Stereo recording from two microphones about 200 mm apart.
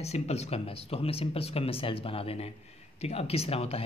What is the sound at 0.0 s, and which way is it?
Speech, 30° left (ahead or behind).